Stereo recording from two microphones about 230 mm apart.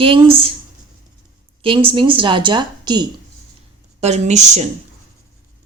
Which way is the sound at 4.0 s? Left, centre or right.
Right.